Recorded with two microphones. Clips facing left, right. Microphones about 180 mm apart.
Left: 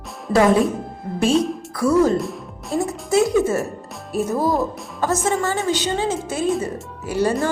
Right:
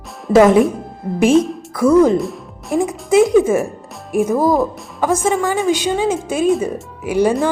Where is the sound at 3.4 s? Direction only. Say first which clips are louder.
Right 5 dB; 90° right.